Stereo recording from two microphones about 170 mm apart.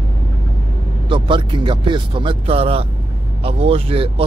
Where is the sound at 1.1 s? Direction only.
30° right (ahead or behind).